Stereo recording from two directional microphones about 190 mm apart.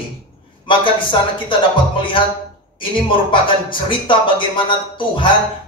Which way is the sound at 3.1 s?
25° left (ahead or behind).